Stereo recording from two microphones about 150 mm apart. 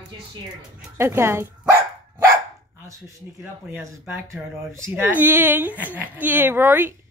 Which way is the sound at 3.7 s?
20° right (ahead or behind).